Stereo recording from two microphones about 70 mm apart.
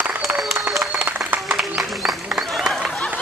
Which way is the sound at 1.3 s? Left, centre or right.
Centre.